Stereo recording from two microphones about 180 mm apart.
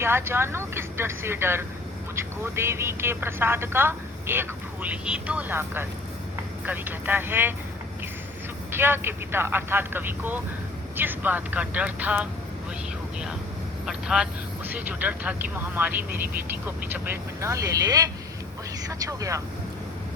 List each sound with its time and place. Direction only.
0.0 s speech: 15° right (ahead or behind)
8.7 s speech: 10° right (ahead or behind)
13.8 s speech: 5° right (ahead or behind)